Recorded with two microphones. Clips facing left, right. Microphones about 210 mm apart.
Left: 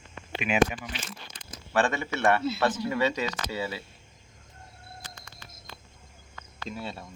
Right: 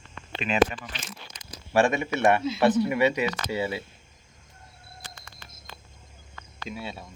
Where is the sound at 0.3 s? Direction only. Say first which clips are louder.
Right 1 dB; 10° left (ahead or behind).